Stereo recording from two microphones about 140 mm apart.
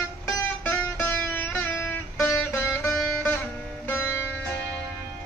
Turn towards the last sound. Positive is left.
turn(degrees=15)  # may be behind; listen again after turning